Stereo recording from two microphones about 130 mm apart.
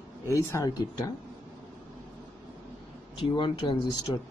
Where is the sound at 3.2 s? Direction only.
35° left (ahead or behind).